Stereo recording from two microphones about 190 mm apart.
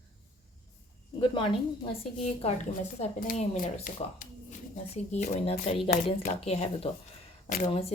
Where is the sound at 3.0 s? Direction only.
40° left (ahead or behind).